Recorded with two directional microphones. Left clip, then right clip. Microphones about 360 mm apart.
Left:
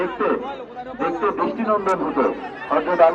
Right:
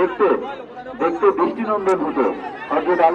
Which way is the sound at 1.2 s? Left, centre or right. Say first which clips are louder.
Right 6 dB; centre.